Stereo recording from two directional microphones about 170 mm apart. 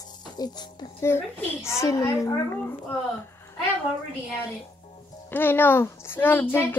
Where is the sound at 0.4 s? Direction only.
25° left (ahead or behind).